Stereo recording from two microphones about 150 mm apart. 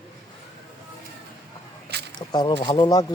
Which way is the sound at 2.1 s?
25° left (ahead or behind).